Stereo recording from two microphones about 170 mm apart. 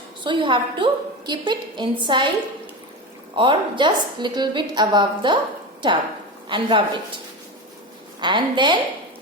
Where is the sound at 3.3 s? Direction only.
30° right (ahead or behind).